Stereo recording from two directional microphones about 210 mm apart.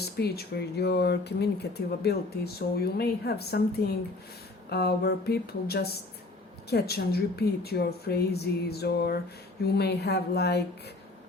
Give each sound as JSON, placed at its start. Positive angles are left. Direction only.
{"t": 0.2, "sound": "speech", "side_deg": 50}